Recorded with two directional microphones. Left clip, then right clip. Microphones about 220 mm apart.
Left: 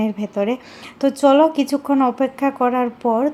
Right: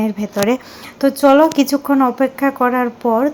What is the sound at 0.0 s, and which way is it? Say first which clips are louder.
Speech: right 3 dB; 15° right (ahead or behind).